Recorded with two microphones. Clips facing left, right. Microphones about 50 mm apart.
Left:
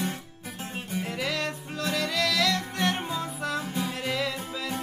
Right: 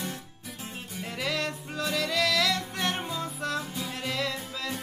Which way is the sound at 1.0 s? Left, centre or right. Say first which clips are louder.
Right 1 dB; centre.